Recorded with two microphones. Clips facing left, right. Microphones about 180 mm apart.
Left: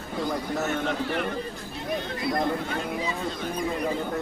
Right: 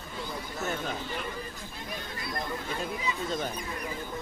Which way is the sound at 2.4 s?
65° left (ahead or behind).